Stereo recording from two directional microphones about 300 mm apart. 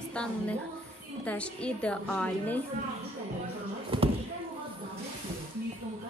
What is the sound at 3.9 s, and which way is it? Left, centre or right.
Speech, centre.